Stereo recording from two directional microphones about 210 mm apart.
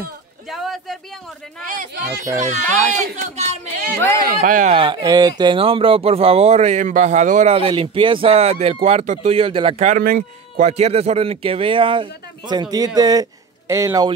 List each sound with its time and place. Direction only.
0.5 s a sound: centre (ahead or behind)
2.4 s speech: 35° right (ahead or behind)
4.7 s a man's voice: 25° right (ahead or behind)